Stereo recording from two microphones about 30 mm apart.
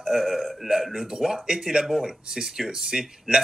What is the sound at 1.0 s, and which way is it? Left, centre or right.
Speech, centre.